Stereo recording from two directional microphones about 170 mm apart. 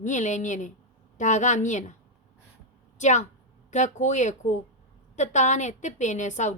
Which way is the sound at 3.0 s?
45° left (ahead or behind).